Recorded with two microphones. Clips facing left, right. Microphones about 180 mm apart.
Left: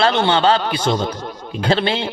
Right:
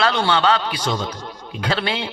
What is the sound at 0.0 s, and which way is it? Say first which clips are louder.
Speech: left 3 dB; 25° left (ahead or behind).